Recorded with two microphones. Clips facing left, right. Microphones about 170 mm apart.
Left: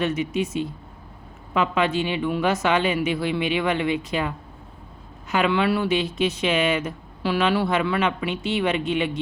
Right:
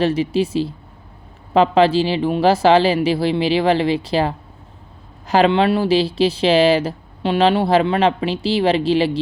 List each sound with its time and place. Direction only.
0.0 s speech: 30° right (ahead or behind)
5.5 s speech: 25° right (ahead or behind)